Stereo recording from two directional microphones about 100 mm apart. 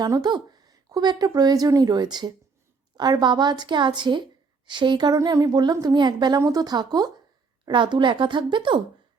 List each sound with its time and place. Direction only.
0.0 s speech: 45° right (ahead or behind)